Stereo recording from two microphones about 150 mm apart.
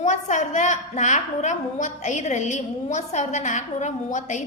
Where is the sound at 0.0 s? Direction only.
50° left (ahead or behind).